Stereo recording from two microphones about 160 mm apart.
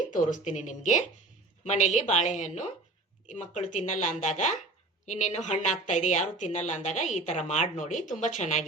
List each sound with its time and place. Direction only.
0.4 s a woman's voice: 50° left (ahead or behind)